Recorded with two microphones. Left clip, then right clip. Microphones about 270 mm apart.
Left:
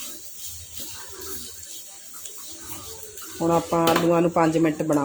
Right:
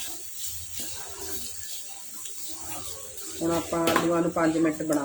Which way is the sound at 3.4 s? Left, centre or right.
Centre.